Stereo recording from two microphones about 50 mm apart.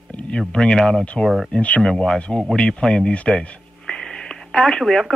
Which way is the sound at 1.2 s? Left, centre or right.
Centre.